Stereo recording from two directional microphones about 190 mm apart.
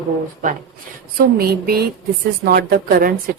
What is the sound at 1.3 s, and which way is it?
Speech, 50° right (ahead or behind).